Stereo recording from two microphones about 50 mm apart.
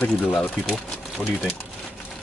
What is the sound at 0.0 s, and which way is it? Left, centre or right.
Speech, left.